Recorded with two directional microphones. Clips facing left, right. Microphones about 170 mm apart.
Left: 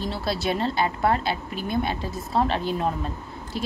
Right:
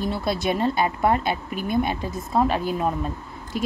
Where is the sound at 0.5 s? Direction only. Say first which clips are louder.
Right 2 dB; 15° right (ahead or behind).